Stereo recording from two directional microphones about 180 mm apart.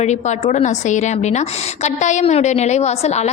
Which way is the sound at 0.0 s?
40° left (ahead or behind).